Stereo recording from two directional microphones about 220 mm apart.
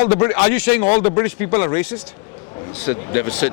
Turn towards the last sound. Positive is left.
turn(degrees=15)  # may be behind; listen again after turning